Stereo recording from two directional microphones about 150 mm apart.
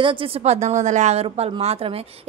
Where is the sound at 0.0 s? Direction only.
40° right (ahead or behind).